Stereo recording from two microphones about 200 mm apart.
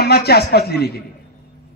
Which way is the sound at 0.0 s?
55° left (ahead or behind).